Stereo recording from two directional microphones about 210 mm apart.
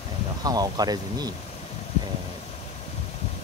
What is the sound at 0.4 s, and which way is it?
Speech, 20° right (ahead or behind).